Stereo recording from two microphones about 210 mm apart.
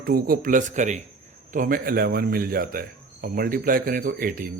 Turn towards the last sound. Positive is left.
turn(degrees=-45)  # may be behind; listen again after turning